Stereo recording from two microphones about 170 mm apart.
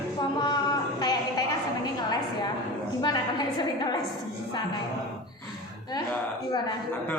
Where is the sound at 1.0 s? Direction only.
25° left (ahead or behind).